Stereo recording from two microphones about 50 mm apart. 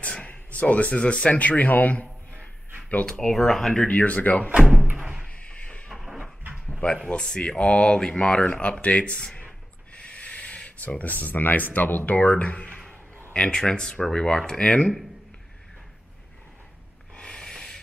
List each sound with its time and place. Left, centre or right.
0.0 s speech: left
3.1 s speech: centre
3.8 s speech: left
5.3 s slam: left
5.9 s a sound: centre
7.1 s speech: centre
9.9 s a sound: left
11.7 s speech: left; by 15.0 s centre
17.1 s a sound: centre